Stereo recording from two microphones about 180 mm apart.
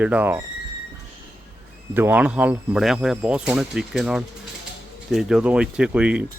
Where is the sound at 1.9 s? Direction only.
10° right (ahead or behind).